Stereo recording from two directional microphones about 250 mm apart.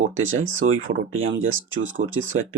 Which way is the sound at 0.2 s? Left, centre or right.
Right.